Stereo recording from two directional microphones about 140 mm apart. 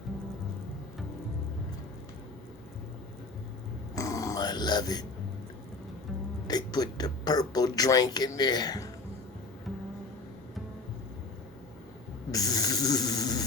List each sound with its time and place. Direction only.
3.9 s grunt: 25° left (ahead or behind)
6.5 s speech: 30° left (ahead or behind)
12.3 s snoring: 25° left (ahead or behind)